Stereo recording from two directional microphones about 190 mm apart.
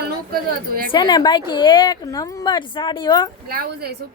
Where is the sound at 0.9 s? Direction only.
20° left (ahead or behind).